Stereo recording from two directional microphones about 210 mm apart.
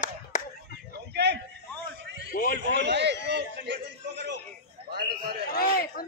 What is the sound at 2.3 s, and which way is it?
Speech, 45° left (ahead or behind).